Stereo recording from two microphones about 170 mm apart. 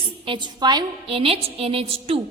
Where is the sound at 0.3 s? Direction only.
25° right (ahead or behind).